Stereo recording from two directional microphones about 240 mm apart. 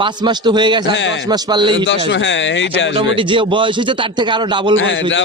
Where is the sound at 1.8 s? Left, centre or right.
Left.